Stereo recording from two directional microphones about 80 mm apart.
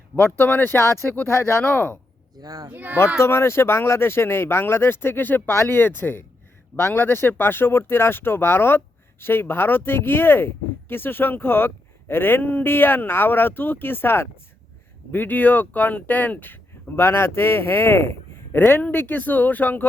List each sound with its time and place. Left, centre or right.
0.2 s speech: left
1.6 s speech: left
2.3 s speech: right
2.6 s speech: right
3.2 s speech: left